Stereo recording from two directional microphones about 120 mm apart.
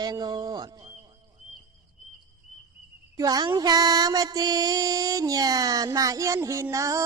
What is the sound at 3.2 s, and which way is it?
Music, 30° right (ahead or behind).